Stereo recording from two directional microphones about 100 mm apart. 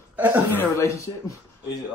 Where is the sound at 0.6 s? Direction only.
30° left (ahead or behind).